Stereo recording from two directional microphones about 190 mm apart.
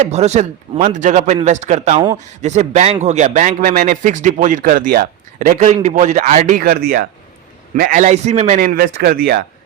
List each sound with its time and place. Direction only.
0.1 s a man's voice: 35° right (ahead or behind); by 9.4 s 50° right (ahead or behind)